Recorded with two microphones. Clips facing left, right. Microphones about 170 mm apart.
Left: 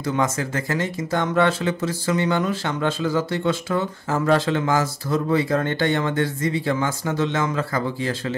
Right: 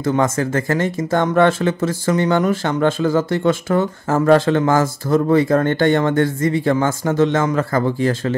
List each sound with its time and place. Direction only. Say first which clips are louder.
0.0 s speech: right 5 dB; 50° right (ahead or behind)